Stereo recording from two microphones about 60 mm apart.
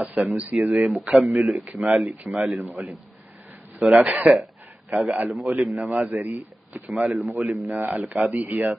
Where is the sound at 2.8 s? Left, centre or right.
Centre.